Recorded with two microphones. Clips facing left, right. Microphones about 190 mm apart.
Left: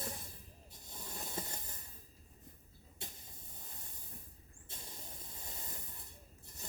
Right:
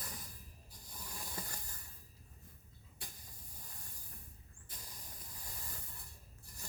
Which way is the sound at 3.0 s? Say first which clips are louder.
Left 4 dB; 25° left (ahead or behind).